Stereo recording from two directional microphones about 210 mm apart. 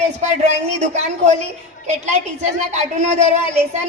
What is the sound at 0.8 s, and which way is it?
A woman's voice, 35° right (ahead or behind).